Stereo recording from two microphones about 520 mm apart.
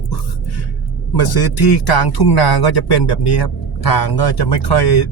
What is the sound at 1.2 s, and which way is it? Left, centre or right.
Speech, left.